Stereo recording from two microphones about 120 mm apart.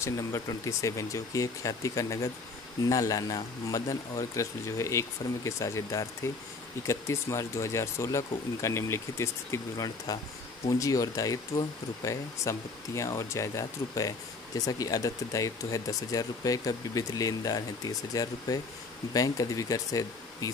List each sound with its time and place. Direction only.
0.0 s speech: 25° left (ahead or behind)